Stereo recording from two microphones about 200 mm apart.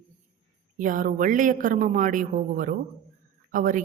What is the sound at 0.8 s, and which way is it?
A woman's voice, 40° right (ahead or behind).